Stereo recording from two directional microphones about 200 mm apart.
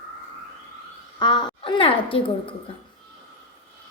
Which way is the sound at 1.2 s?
20° left (ahead or behind).